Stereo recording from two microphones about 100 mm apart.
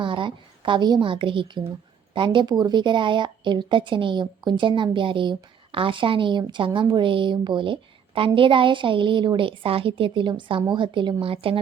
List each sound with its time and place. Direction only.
0.0 s a woman's voice: 55° right (ahead or behind)